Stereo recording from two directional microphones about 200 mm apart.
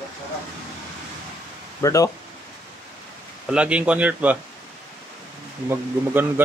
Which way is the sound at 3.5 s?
5° right (ahead or behind).